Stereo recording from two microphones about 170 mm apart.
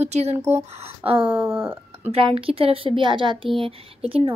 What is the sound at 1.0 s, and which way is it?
Speech, 30° right (ahead or behind).